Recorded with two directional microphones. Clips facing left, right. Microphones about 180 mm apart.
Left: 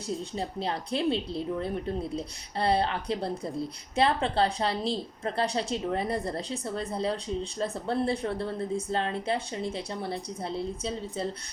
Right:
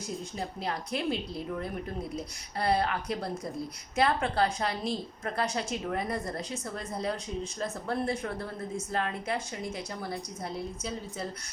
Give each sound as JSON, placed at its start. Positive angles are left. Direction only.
{"t": 0.3, "sound": "a woman's voice", "side_deg": 30}